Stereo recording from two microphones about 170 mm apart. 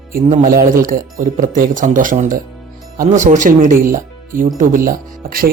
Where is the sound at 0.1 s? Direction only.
55° right (ahead or behind).